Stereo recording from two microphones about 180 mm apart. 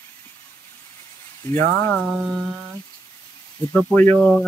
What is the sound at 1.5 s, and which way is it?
Speech, 40° right (ahead or behind).